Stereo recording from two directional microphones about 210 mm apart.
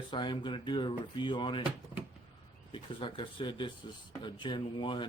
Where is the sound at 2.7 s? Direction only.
25° left (ahead or behind).